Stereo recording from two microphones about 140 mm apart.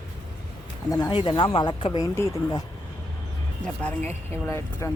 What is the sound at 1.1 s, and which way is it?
Speech, 40° left (ahead or behind).